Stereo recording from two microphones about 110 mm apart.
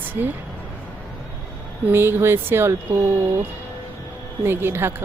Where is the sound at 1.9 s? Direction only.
20° right (ahead or behind).